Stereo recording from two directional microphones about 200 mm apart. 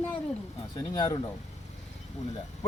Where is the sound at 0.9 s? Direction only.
20° left (ahead or behind).